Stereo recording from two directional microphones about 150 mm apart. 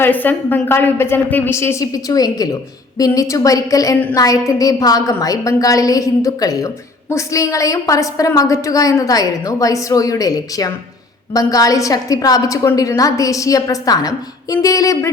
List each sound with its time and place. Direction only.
0.0 s a woman's voice: 10° left (ahead or behind)